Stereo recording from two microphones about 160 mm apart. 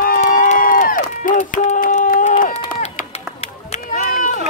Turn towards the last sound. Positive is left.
turn(degrees=55)  # may be behind; listen again after turning